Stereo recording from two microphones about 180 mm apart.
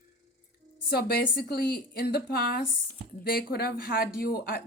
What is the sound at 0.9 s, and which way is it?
A woman's voice, 60° left (ahead or behind).